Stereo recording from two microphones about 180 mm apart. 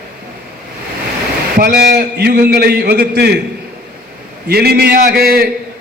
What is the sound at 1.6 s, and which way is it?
A man's voice, 65° right (ahead or behind).